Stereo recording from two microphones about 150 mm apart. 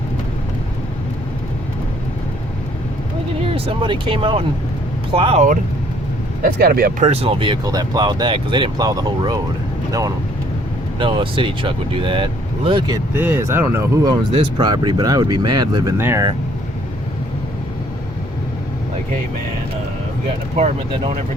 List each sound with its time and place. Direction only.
3.4 s speech: 40° right (ahead or behind)
6.4 s speech: 90° right
7.0 s speech: 40° right (ahead or behind); by 9.4 s 25° right (ahead or behind)
11.0 s speech: 35° right (ahead or behind)
13.1 s speech: 15° right (ahead or behind)